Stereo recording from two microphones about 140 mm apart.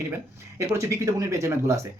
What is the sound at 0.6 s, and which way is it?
Speech, 20° right (ahead or behind).